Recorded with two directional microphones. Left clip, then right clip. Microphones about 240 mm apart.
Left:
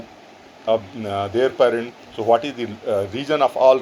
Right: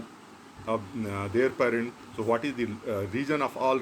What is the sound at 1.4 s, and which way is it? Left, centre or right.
Speech, left.